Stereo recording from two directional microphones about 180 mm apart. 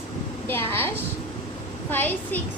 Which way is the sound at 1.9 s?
10° left (ahead or behind).